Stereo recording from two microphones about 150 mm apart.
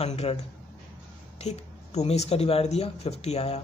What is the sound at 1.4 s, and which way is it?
Speech, 45° left (ahead or behind).